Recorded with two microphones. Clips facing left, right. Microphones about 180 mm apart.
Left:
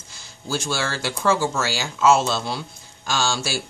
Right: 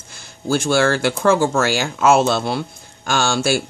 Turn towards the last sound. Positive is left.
turn(degrees=-55)  # may be behind; listen again after turning